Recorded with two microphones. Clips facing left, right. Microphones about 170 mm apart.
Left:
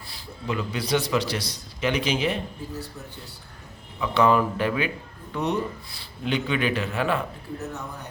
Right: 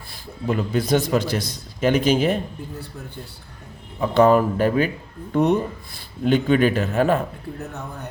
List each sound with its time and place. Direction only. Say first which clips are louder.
0.1 s a man's voice: right 6 dB; 50° right (ahead or behind)
4.0 s speech: right 5 dB; 45° right (ahead or behind)